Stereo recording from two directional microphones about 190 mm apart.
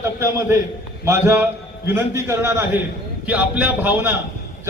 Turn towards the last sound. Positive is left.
turn(degrees=-10)  # may be behind; listen again after turning